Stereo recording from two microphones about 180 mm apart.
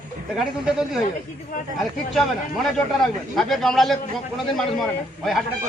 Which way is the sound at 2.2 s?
Centre (ahead or behind).